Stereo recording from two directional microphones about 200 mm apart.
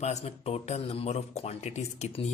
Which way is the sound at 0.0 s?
35° left (ahead or behind).